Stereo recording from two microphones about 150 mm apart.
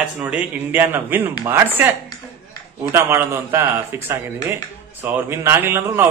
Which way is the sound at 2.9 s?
15° right (ahead or behind).